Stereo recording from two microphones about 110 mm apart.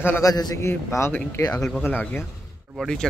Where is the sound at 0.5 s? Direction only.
25° left (ahead or behind).